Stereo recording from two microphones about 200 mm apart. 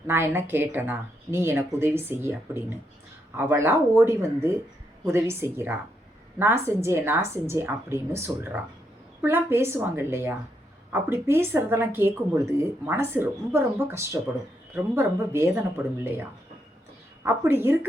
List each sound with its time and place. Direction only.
0.1 s speech: 10° right (ahead or behind)
17.2 s speech: 10° right (ahead or behind)